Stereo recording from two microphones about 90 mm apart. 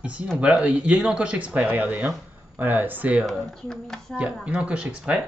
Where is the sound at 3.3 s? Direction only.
5° left (ahead or behind).